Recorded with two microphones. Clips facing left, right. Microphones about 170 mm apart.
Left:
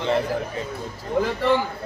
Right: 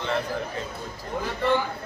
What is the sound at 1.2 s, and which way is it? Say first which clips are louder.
Speech: left 9 dB; 80° left.